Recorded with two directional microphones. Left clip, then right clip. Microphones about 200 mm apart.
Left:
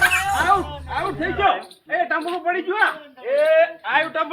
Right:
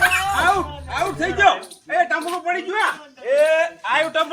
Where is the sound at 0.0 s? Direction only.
Centre (ahead or behind).